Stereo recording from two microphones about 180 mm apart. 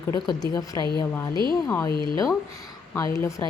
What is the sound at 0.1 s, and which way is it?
A woman's voice, 20° left (ahead or behind).